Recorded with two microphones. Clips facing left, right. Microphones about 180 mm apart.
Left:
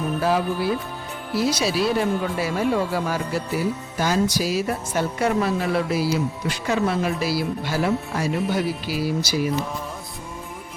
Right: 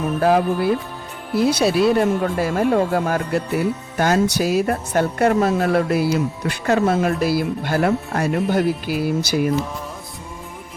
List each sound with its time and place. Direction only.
0.2 s speech: 50° right (ahead or behind)